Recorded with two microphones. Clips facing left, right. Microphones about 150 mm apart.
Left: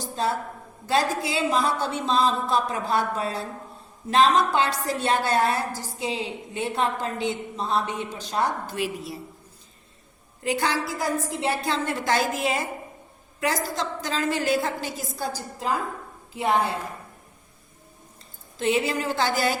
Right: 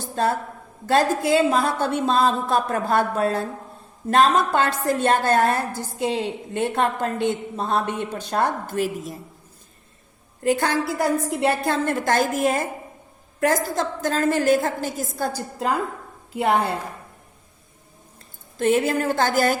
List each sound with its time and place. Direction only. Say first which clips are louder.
0.0 s a sound: right 4 dB; 50° right (ahead or behind)
0.9 s a woman's voice: right 5 dB; 50° right (ahead or behind)
10.4 s a woman's voice: right 4 dB; 50° right (ahead or behind)
18.5 s a woman's voice: right 4 dB; 50° right (ahead or behind)